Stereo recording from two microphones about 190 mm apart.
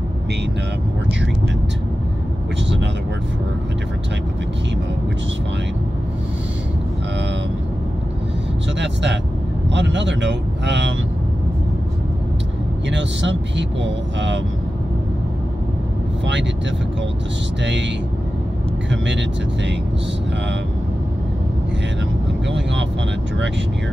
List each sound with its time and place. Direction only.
8.7 s speech: 70° right (ahead or behind)
12.9 s speech: 70° right (ahead or behind)
18.9 s speech: 70° right (ahead or behind)